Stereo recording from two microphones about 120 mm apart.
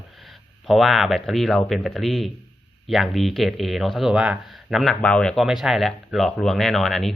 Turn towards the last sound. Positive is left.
turn(degrees=0)  # may be behind; listen again after turning